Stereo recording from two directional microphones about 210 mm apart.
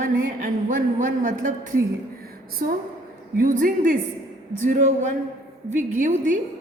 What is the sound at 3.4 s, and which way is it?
A man's voice, 40° right (ahead or behind).